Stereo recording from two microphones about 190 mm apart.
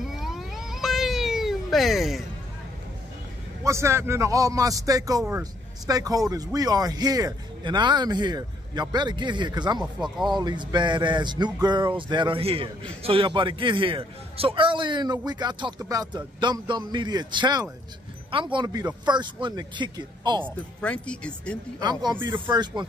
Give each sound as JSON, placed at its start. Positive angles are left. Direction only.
{"t": 0.0, "sound": "cat", "side_deg": 0}
{"t": 3.6, "sound": "a man's voice", "side_deg": -15}
{"t": 20.8, "sound": "speech", "side_deg": 5}
{"t": 21.7, "sound": "speech", "side_deg": -20}